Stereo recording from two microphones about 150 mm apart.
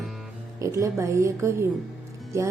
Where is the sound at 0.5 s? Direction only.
20° right (ahead or behind).